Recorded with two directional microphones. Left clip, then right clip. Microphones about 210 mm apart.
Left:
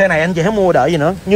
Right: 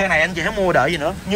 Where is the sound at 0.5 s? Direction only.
20° left (ahead or behind).